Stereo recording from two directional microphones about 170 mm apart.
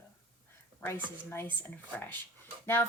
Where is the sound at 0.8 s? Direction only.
15° left (ahead or behind).